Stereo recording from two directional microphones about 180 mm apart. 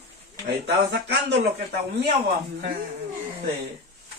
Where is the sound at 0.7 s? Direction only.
65° right (ahead or behind).